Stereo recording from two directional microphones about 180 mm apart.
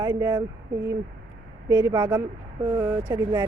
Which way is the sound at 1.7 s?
15° right (ahead or behind).